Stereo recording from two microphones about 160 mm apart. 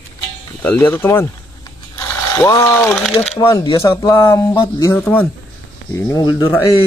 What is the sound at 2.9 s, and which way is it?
Speech, centre (ahead or behind).